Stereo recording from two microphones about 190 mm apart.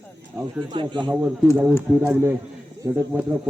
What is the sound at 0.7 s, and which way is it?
Speech, 25° right (ahead or behind).